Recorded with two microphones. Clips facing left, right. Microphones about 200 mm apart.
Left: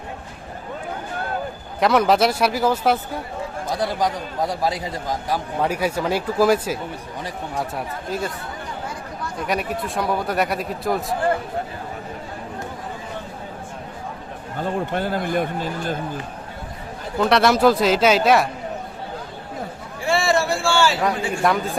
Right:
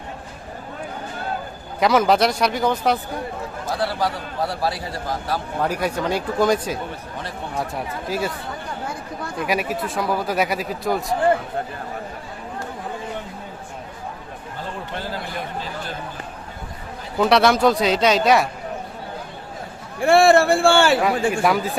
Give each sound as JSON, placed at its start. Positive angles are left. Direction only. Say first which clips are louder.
{"t": 1.8, "sound": "speech", "louder": "even", "side_deg": 0}
{"t": 3.8, "sound": "a man's voice", "louder": "left 1 dB", "side_deg": 15}
{"t": 8.1, "sound": "speech", "louder": "right 2 dB", "side_deg": -5}
{"t": 9.5, "sound": "speech", "louder": "right 1 dB", "side_deg": -5}
{"t": 14.9, "sound": "a man's voice", "louder": "left 6 dB", "side_deg": 55}
{"t": 17.2, "sound": "speech", "louder": "right 1 dB", "side_deg": 0}
{"t": 20.0, "sound": "a man's voice", "louder": "right 6 dB", "side_deg": -55}
{"t": 21.0, "sound": "speech", "louder": "right 2 dB", "side_deg": -5}